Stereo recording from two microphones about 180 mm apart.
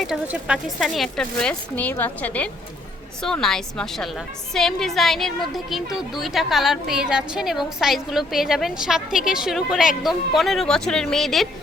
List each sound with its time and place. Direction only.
0.0 s a woman's voice: 5° right (ahead or behind)